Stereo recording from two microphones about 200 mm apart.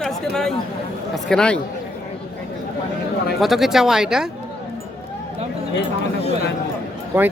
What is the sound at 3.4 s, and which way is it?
Speech, centre (ahead or behind).